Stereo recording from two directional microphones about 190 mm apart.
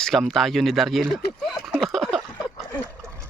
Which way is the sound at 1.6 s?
Centre (ahead or behind).